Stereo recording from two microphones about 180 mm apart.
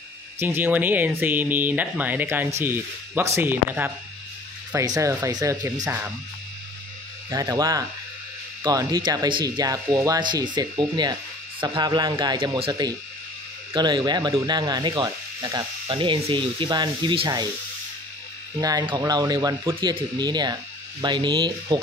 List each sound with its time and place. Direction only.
0.4 s speech: 10° right (ahead or behind)
7.2 s speech: 20° right (ahead or behind)
18.6 s speech: 20° right (ahead or behind)